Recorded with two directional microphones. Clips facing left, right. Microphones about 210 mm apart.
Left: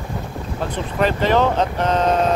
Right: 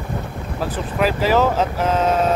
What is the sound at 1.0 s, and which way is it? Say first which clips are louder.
Speech: even; 5° right (ahead or behind).